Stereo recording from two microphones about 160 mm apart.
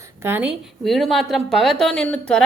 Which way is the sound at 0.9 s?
Centre (ahead or behind).